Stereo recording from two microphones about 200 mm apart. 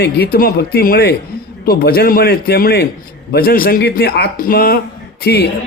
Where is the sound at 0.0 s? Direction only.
50° left (ahead or behind).